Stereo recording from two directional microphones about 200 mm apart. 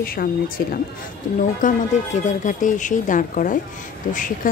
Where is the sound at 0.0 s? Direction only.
50° left (ahead or behind).